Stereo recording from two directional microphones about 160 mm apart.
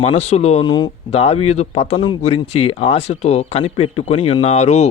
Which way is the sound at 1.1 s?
40° left (ahead or behind).